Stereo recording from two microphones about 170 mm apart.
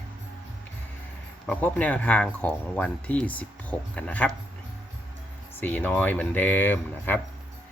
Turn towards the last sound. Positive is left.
turn(degrees=10)  # may be behind; listen again after turning